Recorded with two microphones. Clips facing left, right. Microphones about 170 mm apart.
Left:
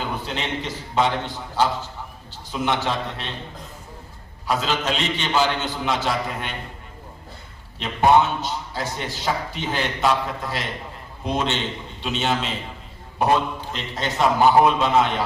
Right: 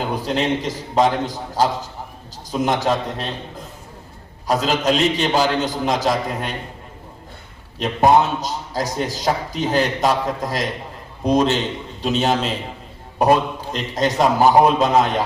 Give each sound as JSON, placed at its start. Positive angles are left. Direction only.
{"t": 0.1, "sound": "a man's voice", "side_deg": -35}
{"t": 4.4, "sound": "a man's voice", "side_deg": -40}
{"t": 7.8, "sound": "a man's voice", "side_deg": -40}
{"t": 13.7, "sound": "a man's voice", "side_deg": -40}